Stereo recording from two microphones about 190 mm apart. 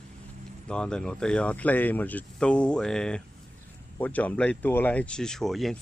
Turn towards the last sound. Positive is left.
turn(degrees=0)  # may be behind; listen again after turning